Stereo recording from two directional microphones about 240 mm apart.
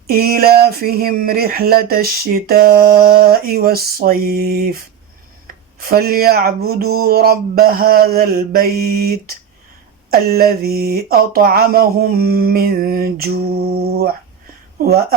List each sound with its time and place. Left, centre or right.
0.1 s speech: right
5.8 s speech: right